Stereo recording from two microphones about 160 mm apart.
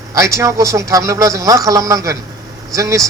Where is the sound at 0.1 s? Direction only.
20° right (ahead or behind).